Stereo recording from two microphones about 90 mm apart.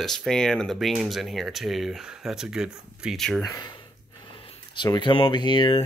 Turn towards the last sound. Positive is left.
turn(degrees=65)  # may be behind; listen again after turning